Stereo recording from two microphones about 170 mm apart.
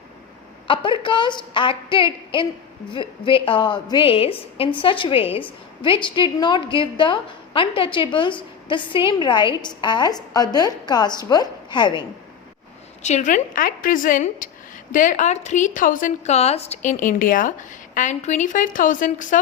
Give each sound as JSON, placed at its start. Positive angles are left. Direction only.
{"t": 0.7, "sound": "a woman's voice", "side_deg": 30}
{"t": 13.0, "sound": "a woman's voice", "side_deg": 45}